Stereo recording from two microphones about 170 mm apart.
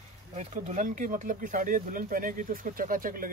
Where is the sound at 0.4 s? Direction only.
45° right (ahead or behind).